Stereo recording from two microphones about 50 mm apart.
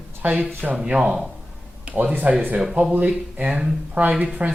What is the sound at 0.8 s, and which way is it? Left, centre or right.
Speech, centre.